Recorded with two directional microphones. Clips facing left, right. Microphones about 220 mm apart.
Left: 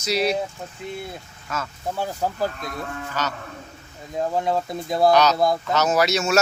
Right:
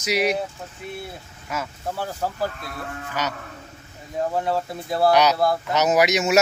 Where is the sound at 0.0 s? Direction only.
15° right (ahead or behind).